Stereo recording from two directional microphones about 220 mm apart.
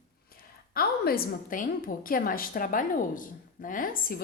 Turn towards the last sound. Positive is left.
turn(degrees=40)  # may be behind; listen again after turning